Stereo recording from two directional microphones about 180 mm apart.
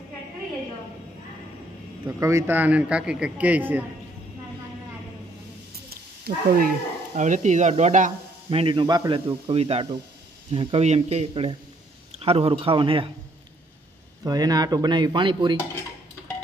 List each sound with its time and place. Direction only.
2.0 s a man's voice: 15° right (ahead or behind)
5.9 s cat: 55° right (ahead or behind)
7.2 s speech: 45° right (ahead or behind)
8.5 s speech: 30° right (ahead or behind)
14.2 s speech: 20° right (ahead or behind)